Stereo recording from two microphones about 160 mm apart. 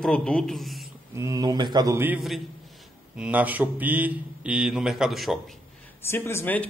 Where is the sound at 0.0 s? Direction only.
5° left (ahead or behind).